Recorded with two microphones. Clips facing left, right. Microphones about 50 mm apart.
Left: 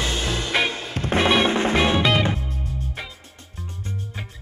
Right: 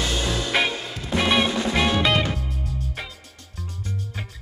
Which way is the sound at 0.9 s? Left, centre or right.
Left.